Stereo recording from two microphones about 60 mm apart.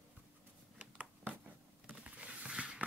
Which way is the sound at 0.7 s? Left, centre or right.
Right.